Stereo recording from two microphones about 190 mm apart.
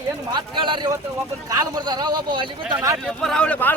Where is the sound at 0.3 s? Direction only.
25° right (ahead or behind).